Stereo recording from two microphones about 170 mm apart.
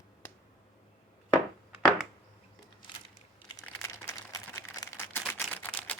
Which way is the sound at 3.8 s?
15° left (ahead or behind).